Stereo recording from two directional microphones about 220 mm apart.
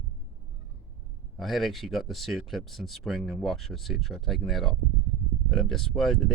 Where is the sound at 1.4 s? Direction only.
Centre (ahead or behind).